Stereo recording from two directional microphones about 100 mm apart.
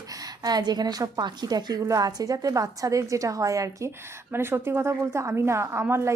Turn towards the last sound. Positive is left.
turn(degrees=-25)  # may be behind; listen again after turning